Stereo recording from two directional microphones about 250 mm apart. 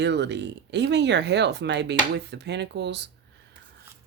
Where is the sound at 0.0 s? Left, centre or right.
Right.